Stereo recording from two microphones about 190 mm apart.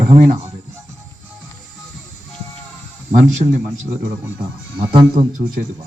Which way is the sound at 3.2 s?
35° right (ahead or behind).